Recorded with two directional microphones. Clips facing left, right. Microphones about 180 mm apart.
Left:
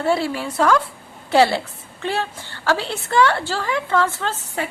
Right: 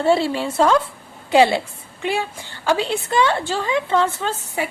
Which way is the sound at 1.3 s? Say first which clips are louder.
Right 1 dB; 15° right (ahead or behind).